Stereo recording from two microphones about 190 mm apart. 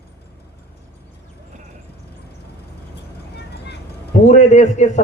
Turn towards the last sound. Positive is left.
turn(degrees=40)  # may be behind; listen again after turning